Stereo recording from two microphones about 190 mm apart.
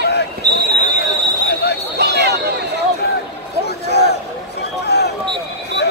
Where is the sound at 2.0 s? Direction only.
60° right (ahead or behind).